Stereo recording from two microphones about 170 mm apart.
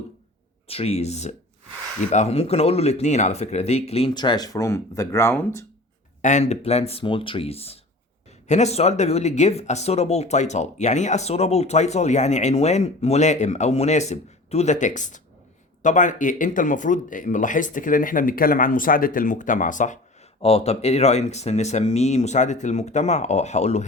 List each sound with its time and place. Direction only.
0.7 s speech: 35° left (ahead or behind)
4.1 s speech: 25° left (ahead or behind)
6.2 s speech: 40° left (ahead or behind)
20.4 s speech: 35° left (ahead or behind)